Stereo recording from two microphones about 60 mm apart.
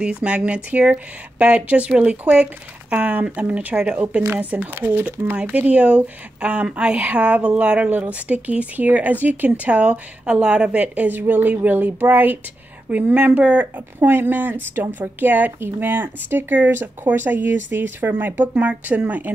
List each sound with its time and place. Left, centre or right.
0.0 s speech: centre
4.6 s speech: right
5.4 s speech: right
13.9 s speech: right